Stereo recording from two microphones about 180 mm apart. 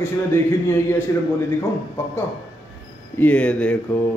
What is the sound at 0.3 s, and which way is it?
Speech, 15° left (ahead or behind).